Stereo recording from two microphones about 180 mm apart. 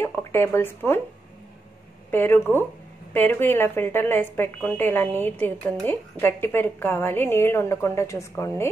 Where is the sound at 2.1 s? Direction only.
10° left (ahead or behind).